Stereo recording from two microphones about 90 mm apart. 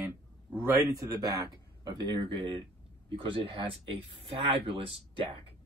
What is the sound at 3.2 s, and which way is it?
Speech, 80° right.